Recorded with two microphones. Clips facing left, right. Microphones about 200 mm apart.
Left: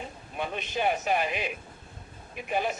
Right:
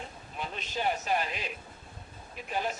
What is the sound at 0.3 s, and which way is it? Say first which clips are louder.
Speech: left 6 dB; 60° left (ahead or behind).